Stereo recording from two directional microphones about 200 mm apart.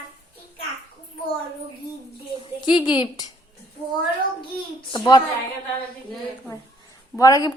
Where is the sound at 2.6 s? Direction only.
20° left (ahead or behind).